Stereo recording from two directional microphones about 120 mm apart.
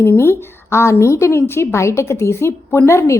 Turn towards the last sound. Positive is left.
turn(degrees=20)  # may be behind; listen again after turning